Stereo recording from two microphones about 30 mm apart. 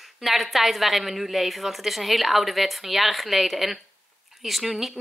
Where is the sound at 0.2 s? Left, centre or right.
Centre.